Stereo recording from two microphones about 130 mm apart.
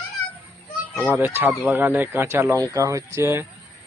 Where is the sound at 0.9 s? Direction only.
15° right (ahead or behind).